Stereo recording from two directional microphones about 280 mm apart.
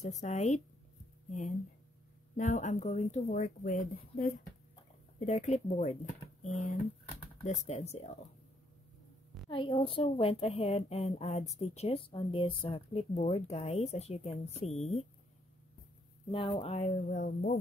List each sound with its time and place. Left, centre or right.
0.0 s speech: left
2.3 s speech: left
9.5 s speech: centre
16.3 s speech: centre